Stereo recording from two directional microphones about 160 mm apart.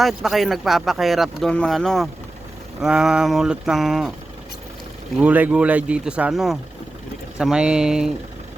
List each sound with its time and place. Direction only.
0.0 s speech: centre (ahead or behind)
5.2 s speech: 10° right (ahead or behind)